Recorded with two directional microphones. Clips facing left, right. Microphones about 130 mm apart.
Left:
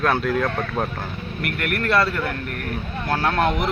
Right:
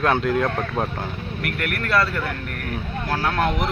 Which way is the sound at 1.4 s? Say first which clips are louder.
Left 3 dB; centre (ahead or behind).